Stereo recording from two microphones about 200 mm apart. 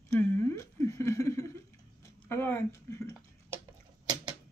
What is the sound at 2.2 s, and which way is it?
Speech, 10° left (ahead or behind).